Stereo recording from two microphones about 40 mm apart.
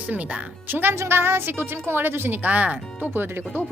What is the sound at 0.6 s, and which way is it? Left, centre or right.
Speech, right.